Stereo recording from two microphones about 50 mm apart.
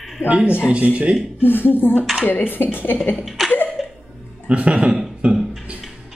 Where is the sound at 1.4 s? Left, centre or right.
Left.